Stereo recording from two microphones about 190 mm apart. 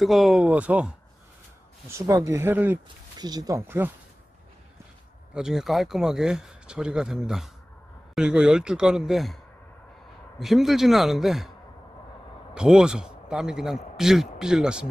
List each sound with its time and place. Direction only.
0.0 s speech: centre (ahead or behind)
3.2 s speech: 20° right (ahead or behind)
5.3 s speech: 5° right (ahead or behind)
10.4 s speech: centre (ahead or behind)
12.5 s speech: 5° right (ahead or behind)